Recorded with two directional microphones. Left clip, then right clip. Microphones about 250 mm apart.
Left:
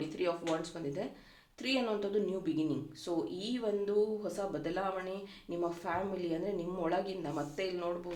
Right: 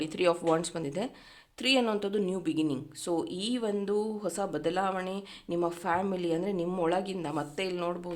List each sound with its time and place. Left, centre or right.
0.2 s speech: right